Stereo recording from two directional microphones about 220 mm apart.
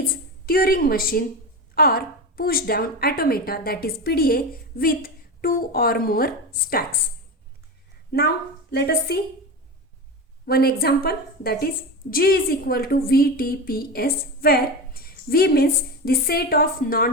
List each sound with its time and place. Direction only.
0.4 s a woman's voice: 40° left (ahead or behind)
8.1 s a woman's voice: 45° left (ahead or behind)
10.4 s a woman's voice: 45° left (ahead or behind)